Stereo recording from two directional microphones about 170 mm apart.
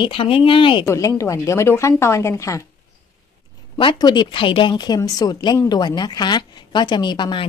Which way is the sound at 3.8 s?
25° left (ahead or behind).